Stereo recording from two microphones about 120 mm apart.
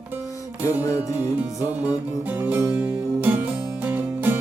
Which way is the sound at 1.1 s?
15° right (ahead or behind).